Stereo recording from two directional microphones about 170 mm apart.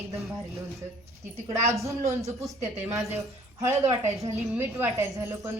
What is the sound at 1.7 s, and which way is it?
A woman's voice, 20° right (ahead or behind).